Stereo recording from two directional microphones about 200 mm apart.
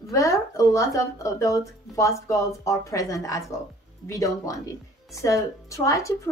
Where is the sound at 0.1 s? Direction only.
15° left (ahead or behind).